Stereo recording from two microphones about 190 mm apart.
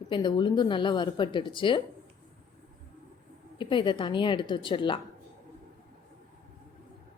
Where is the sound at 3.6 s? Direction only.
25° left (ahead or behind).